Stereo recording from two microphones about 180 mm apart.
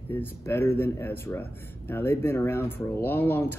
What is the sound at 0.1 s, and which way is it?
Speech, 10° left (ahead or behind).